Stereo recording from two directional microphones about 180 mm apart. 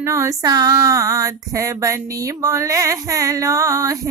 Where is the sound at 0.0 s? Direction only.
15° right (ahead or behind).